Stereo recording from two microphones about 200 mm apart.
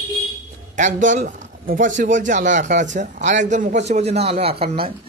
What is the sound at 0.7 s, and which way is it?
A man's voice, 40° right (ahead or behind).